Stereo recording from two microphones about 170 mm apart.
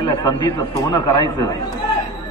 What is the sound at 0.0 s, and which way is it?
A man's voice, 20° left (ahead or behind).